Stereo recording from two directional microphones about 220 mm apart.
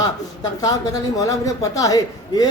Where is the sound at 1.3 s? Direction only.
15° left (ahead or behind).